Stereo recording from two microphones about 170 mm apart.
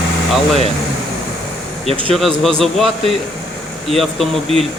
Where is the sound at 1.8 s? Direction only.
30° right (ahead or behind).